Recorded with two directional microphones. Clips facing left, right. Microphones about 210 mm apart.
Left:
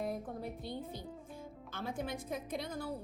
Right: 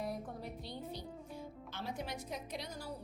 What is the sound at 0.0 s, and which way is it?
Music, 50° left (ahead or behind).